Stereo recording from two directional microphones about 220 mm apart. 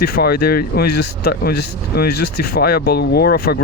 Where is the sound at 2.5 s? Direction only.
45° left (ahead or behind).